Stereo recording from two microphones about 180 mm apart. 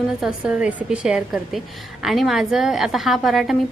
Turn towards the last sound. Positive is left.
turn(degrees=0)  # may be behind; listen again after turning